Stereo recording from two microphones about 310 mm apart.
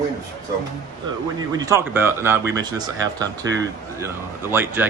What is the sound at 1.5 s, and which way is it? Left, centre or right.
Speech, centre.